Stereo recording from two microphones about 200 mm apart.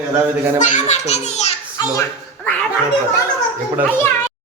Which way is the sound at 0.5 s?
40° left (ahead or behind).